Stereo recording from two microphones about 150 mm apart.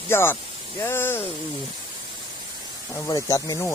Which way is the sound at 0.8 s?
15° left (ahead or behind).